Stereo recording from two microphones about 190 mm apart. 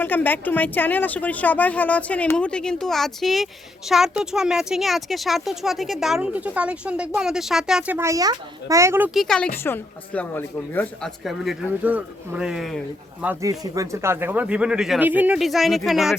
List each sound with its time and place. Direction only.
0.0 s a woman's voice: 10° left (ahead or behind); by 9.0 s 15° right (ahead or behind)
9.1 s a woman's voice: 5° left (ahead or behind)
11.2 s a woman's voice: centre (ahead or behind)
13.2 s speech: 15° right (ahead or behind); by 16.1 s centre (ahead or behind)